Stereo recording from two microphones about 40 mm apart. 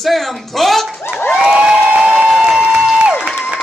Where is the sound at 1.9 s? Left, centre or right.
Right.